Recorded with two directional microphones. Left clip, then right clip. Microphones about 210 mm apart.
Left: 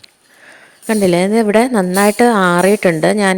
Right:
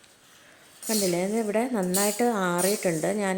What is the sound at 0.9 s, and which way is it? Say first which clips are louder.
A woman's voice: left 13 dB; 45° left (ahead or behind).